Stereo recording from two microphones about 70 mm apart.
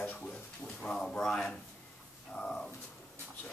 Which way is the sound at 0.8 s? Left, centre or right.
Centre.